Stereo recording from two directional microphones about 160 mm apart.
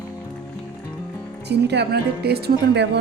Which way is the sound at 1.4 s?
90° right.